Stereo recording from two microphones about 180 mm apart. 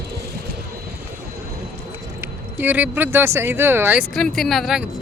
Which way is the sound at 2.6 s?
10° right (ahead or behind).